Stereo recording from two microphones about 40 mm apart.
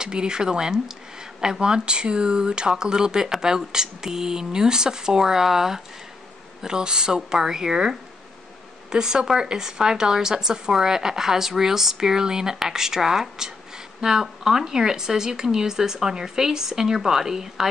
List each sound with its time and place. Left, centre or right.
0.0 s speech: right